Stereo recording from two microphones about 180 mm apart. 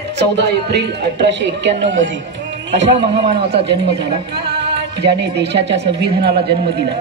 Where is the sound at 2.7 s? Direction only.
75° right (ahead or behind).